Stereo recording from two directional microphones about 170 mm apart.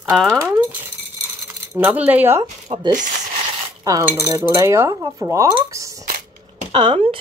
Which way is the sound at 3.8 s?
15° right (ahead or behind).